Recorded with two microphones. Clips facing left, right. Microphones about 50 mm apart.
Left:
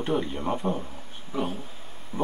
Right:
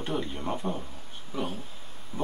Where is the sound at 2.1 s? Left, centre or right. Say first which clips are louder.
Left 5 dB; left.